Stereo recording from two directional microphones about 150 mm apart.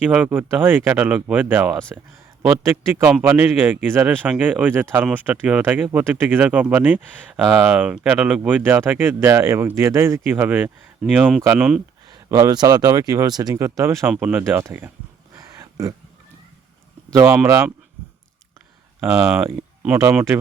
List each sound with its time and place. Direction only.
0.0 s speech: 10° right (ahead or behind)
12.0 s speech: 25° right (ahead or behind); by 14.6 s 10° right (ahead or behind)
14.6 s a sound: 15° right (ahead or behind)
17.2 s speech: 15° right (ahead or behind)
18.9 s speech: 15° right (ahead or behind)